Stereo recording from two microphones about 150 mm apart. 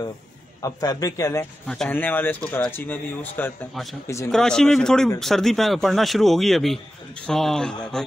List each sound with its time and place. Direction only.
0.6 s a man's voice: 25° left (ahead or behind)
1.7 s speech: 10° left (ahead or behind)